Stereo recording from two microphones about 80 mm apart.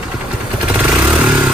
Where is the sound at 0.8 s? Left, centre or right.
Centre.